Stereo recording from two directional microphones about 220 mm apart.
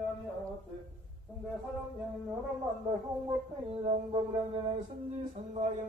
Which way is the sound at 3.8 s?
25° right (ahead or behind).